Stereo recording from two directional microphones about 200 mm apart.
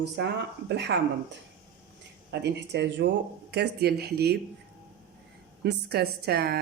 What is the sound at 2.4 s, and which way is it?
Speech, 60° right (ahead or behind).